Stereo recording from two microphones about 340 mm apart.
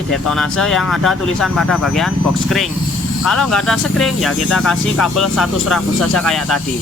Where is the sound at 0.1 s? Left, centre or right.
Centre.